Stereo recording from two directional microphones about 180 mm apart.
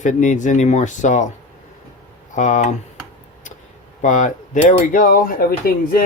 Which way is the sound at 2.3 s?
45° left (ahead or behind).